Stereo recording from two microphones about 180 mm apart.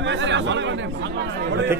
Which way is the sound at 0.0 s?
90° right.